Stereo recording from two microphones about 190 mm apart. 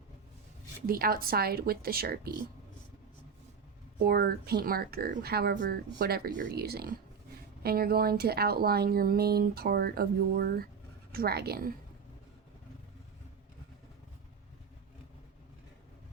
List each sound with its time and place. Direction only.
0.9 s speech: 50° right (ahead or behind)
4.0 s speech: 55° right (ahead or behind)